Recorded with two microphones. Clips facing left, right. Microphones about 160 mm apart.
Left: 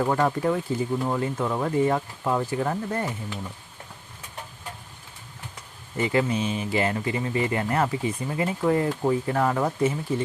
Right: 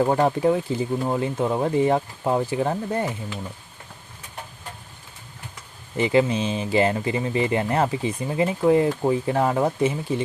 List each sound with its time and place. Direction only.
0.0 s speech: 25° right (ahead or behind)
6.0 s speech: 20° right (ahead or behind)